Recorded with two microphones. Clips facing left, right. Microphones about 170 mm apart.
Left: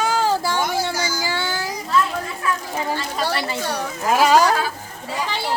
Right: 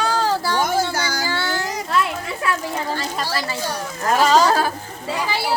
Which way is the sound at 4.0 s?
5° left (ahead or behind).